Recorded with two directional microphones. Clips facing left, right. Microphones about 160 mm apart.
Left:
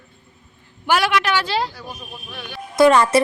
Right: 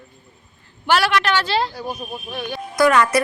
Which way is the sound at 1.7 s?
40° right (ahead or behind).